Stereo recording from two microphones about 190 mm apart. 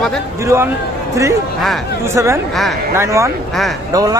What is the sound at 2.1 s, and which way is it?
Speech, 15° right (ahead or behind).